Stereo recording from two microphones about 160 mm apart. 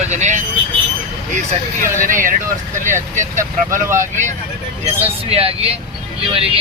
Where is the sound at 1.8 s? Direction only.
55° right (ahead or behind).